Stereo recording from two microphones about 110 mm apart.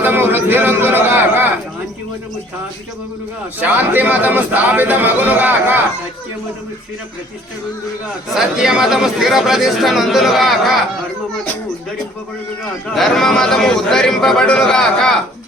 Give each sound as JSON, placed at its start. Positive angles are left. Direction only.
{"t": 0.0, "sound": "a sound", "side_deg": -15}
{"t": 3.6, "sound": "speech", "side_deg": -15}
{"t": 8.3, "sound": "speech", "side_deg": -5}
{"t": 12.9, "sound": "speech", "side_deg": 0}